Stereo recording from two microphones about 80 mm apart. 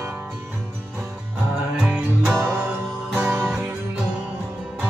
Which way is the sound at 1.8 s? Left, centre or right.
Centre.